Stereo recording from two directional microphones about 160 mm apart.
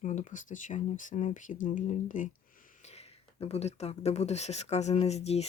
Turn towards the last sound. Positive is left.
turn(degrees=40)  # may be behind; listen again after turning